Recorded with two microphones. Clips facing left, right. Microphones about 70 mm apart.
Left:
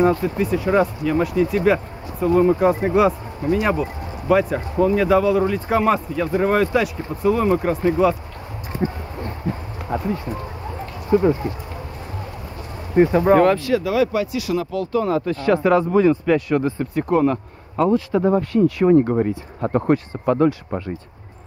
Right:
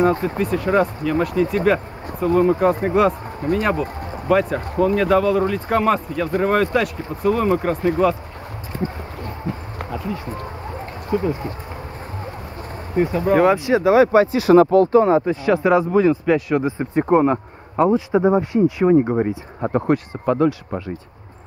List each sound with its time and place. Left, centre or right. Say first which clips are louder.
0.4 s speech: even; centre
9.8 s speech: left 4 dB; left
12.9 s speech: left 4 dB; left
13.7 s speech: right 5 dB; right
15.4 s speech: even; centre
16.7 s speech: right 3 dB; right
18.8 s speech: left 1 dB; centre